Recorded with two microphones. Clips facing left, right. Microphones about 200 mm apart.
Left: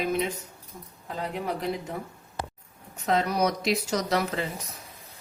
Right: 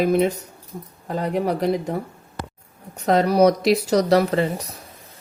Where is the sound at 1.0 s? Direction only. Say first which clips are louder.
Right 9 dB; 50° right (ahead or behind).